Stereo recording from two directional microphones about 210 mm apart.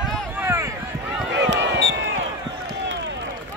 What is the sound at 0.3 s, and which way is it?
Run, 10° right (ahead or behind).